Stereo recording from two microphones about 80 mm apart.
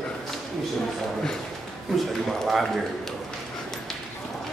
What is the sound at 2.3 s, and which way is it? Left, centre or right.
Speech, centre.